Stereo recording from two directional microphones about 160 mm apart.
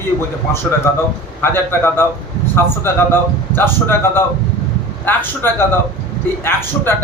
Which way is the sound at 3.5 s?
15° left (ahead or behind).